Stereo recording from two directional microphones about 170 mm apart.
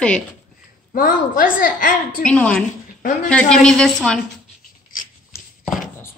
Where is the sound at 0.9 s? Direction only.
55° left (ahead or behind).